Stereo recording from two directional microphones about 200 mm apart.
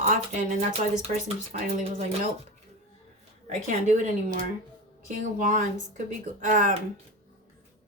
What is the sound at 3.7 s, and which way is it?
Speech, 35° right (ahead or behind).